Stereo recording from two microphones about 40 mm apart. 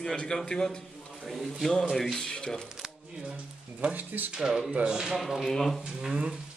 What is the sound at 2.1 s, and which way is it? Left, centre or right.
Chuckle, centre.